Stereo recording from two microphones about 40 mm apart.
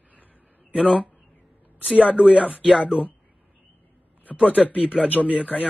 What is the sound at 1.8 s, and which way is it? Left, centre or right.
Speech, right.